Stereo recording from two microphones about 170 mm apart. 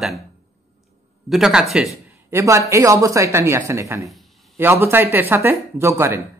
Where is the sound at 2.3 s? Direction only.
15° right (ahead or behind).